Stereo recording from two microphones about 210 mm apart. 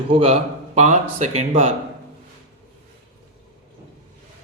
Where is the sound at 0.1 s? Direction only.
25° right (ahead or behind).